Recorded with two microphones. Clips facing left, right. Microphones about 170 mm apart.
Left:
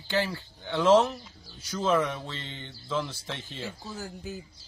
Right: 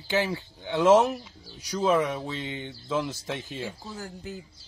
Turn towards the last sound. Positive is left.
turn(degrees=-15)  # may be behind; listen again after turning